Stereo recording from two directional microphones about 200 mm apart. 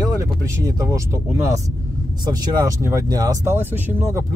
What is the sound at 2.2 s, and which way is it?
Speech, 15° right (ahead or behind).